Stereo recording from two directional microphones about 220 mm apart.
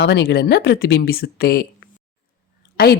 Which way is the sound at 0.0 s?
50° left (ahead or behind).